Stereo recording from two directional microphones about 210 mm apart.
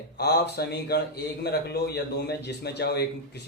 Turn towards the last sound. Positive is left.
turn(degrees=50)  # may be behind; listen again after turning